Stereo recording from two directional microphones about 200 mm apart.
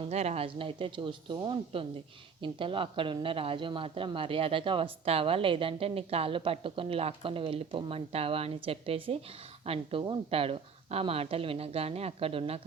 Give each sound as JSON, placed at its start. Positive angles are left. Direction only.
{"t": 0.0, "sound": "speech", "side_deg": -30}